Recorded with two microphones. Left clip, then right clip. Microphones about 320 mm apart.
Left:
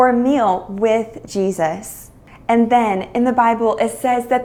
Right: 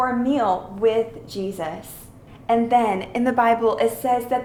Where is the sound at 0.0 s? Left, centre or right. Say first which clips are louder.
Left 7 dB; left.